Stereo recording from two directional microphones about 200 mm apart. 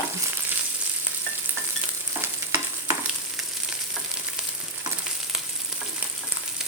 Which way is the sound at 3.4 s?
Centre (ahead or behind).